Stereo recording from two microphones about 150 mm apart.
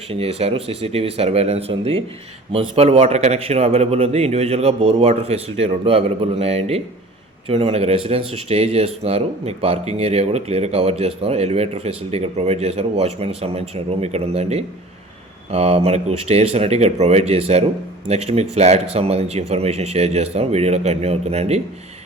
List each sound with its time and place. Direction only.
0.1 s speech: 40° right (ahead or behind)